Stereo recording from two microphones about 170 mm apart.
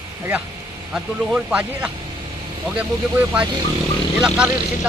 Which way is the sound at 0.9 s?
5° right (ahead or behind).